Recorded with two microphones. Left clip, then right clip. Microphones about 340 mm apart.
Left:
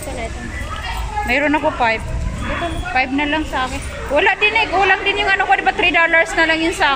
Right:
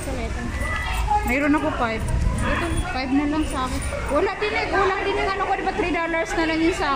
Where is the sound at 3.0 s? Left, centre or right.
Left.